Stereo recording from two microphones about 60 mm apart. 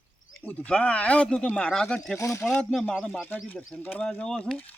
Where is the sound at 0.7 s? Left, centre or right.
Centre.